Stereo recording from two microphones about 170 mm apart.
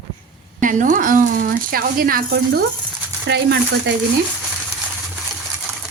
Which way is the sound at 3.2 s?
85° right.